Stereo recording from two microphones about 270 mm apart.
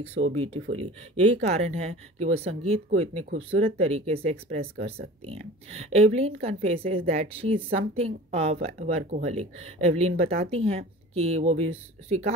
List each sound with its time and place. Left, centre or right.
0.3 s a woman's voice: right